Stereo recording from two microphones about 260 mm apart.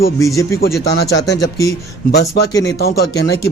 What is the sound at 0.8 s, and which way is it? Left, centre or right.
Speech, left.